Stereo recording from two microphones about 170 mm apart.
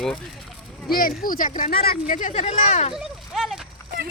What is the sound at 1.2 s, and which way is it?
Speech, 55° left (ahead or behind).